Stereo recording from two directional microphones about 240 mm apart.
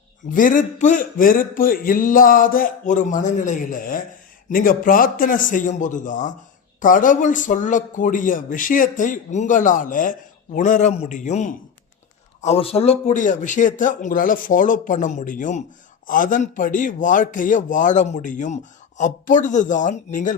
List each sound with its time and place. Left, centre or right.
0.3 s a man's voice: left